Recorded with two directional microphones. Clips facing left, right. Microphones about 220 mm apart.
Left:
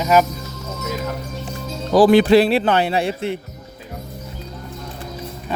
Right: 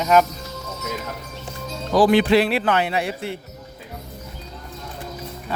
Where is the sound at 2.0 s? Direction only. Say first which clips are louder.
Left 4 dB; 35° left (ahead or behind); by 3.4 s 20° left (ahead or behind).